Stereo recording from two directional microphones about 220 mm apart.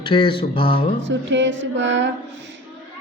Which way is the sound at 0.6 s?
50° right (ahead or behind).